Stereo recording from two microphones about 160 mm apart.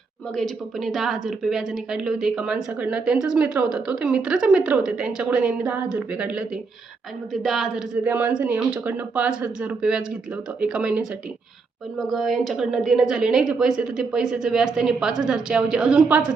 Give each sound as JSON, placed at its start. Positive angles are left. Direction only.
{"t": 0.3, "sound": "a woman's voice", "side_deg": 0}